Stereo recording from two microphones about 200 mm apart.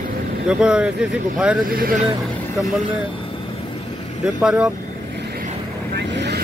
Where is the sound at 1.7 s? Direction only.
45° right (ahead or behind).